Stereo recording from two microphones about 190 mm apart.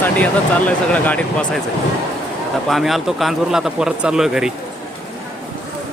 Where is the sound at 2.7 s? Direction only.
Centre (ahead or behind).